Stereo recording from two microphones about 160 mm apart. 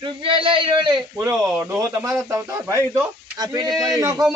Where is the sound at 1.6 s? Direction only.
15° right (ahead or behind).